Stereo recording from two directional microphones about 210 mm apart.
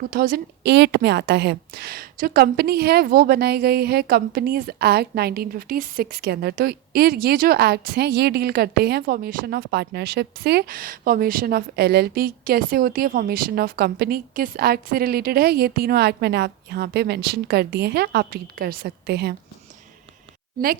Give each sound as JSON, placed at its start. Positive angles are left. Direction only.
{"t": 0.1, "sound": "a woman's voice", "side_deg": -45}